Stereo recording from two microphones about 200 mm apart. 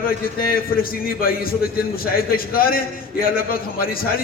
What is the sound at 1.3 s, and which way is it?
A man's voice, 50° left (ahead or behind).